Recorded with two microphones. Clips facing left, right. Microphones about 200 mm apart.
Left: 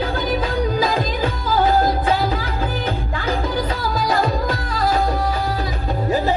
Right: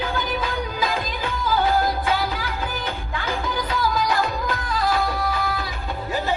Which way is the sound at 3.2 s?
35° left (ahead or behind).